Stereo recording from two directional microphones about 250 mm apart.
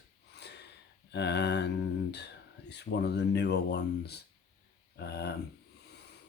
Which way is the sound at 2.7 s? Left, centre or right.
Left.